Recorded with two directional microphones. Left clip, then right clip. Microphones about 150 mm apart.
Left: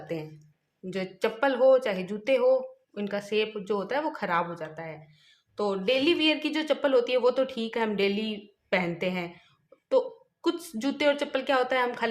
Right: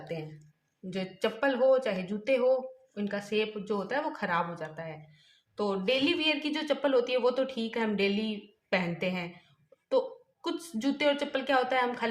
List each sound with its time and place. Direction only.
0.1 s speech: 40° left (ahead or behind)